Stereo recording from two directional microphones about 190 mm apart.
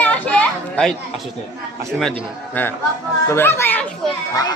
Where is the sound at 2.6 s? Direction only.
10° left (ahead or behind).